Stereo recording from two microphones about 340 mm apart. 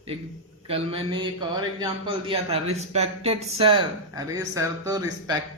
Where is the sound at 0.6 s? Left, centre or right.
Centre.